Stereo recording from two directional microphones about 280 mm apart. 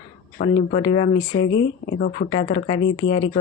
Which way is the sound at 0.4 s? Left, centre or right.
Left.